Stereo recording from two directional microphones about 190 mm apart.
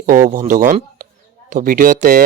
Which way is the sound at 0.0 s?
45° right (ahead or behind).